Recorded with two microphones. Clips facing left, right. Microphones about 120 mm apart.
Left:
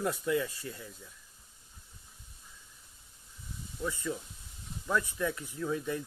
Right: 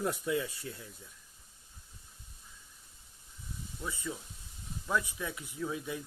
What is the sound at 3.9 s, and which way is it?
Speech, 10° right (ahead or behind).